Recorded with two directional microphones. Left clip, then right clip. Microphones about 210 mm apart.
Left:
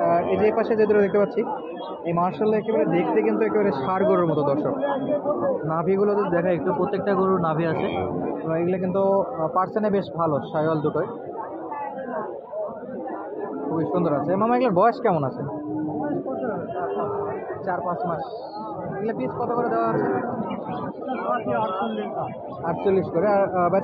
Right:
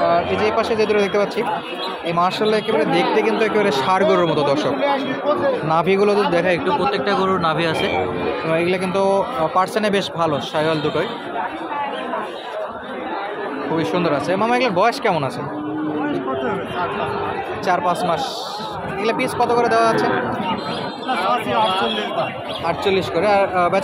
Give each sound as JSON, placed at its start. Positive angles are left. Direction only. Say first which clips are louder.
{"t": 0.0, "sound": "speech", "louder": "right 3 dB", "side_deg": 10}
{"t": 5.7, "sound": "speech", "louder": "right 7 dB", "side_deg": -10}
{"t": 13.7, "sound": "speech", "louder": "right 3 dB", "side_deg": -10}
{"t": 14.4, "sound": "speech", "louder": "right 2 dB", "side_deg": 5}
{"t": 19.0, "sound": "speech", "louder": "right 9 dB", "side_deg": -30}
{"t": 22.7, "sound": "speech", "louder": "right 3 dB", "side_deg": 0}